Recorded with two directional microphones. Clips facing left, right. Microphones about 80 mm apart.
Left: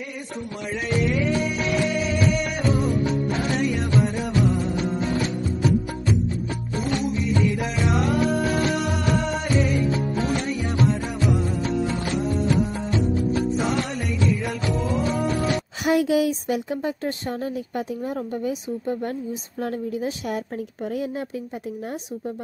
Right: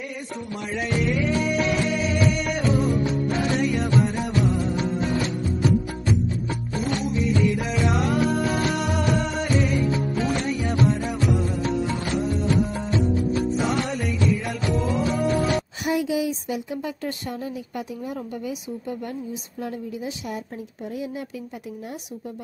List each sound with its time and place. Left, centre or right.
1.0 s music: centre
7.2 s music: centre
13.6 s music: centre
15.8 s speech: left
16.7 s speech: left
19.6 s a woman's voice: left